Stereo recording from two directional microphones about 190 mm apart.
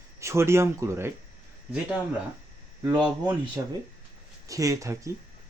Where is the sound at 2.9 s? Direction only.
Centre (ahead or behind).